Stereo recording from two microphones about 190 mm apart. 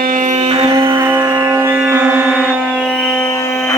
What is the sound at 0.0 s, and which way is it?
Music, 45° right (ahead or behind).